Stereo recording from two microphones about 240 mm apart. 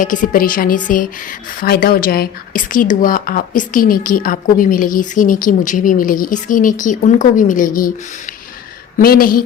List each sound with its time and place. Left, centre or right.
0.0 s speech: left